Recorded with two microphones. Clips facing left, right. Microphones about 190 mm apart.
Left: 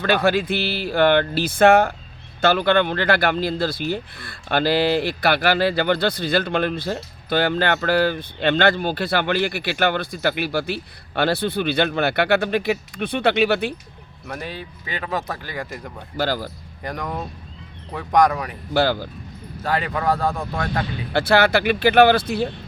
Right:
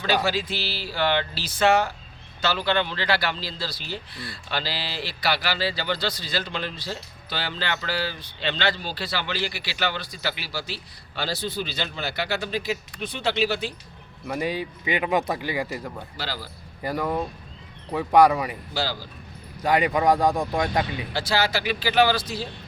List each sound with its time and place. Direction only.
0.0 s speech: 55° left (ahead or behind)
14.3 s speech: 10° right (ahead or behind)
16.1 s speech: 50° left (ahead or behind)
16.8 s speech: 5° right (ahead or behind)
18.7 s speech: 55° left (ahead or behind)
19.6 s speech: 15° right (ahead or behind)
21.1 s speech: 60° left (ahead or behind)